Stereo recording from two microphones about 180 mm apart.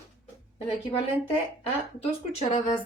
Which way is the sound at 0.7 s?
35° left (ahead or behind).